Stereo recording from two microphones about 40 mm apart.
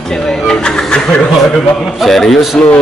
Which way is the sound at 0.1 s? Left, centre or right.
Centre.